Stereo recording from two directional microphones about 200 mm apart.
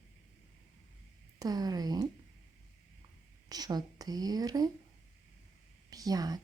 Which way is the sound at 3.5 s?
20° right (ahead or behind).